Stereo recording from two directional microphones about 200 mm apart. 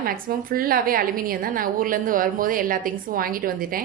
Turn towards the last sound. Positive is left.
turn(degrees=-45)  # may be behind; listen again after turning